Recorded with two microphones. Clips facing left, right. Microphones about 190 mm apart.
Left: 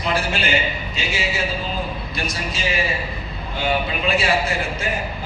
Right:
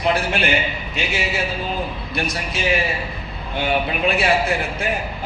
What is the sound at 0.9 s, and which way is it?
Speech, 60° right (ahead or behind).